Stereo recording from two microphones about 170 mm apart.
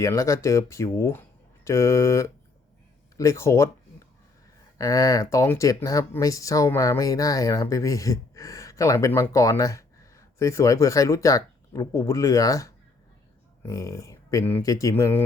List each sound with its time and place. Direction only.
0.0 s speech: 20° left (ahead or behind)
4.8 s speech: 20° left (ahead or behind)